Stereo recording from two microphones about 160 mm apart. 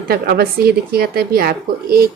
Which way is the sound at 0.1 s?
70° right (ahead or behind).